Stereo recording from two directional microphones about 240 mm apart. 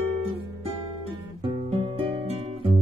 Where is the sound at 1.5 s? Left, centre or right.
Right.